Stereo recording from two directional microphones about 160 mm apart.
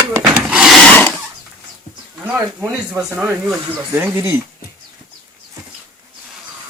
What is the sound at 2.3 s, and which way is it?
Speech, 10° right (ahead or behind).